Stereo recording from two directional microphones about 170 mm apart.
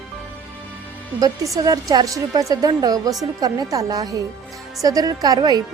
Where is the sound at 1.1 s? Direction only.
20° right (ahead or behind).